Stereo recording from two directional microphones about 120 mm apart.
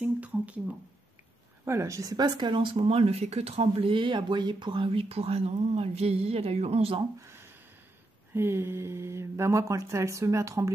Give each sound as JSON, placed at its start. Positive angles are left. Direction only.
{"t": 0.0, "sound": "speech", "side_deg": -10}
{"t": 1.6, "sound": "speech", "side_deg": -25}
{"t": 7.2, "sound": "a sound", "side_deg": -20}
{"t": 8.3, "sound": "speech", "side_deg": -20}